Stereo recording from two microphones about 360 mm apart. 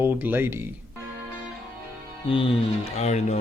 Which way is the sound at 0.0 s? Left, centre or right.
Centre.